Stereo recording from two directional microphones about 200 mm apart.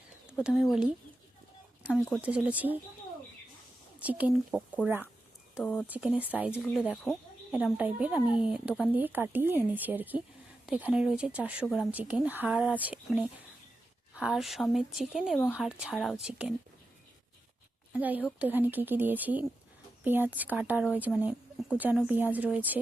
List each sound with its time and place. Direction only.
0.3 s speech: centre (ahead or behind)
2.0 s speech: 5° left (ahead or behind)
2.2 s speech: 5° right (ahead or behind)
4.0 s speech: 5° right (ahead or behind)
17.9 s speech: 10° right (ahead or behind)